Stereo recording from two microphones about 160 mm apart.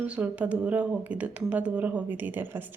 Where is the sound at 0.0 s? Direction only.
10° right (ahead or behind).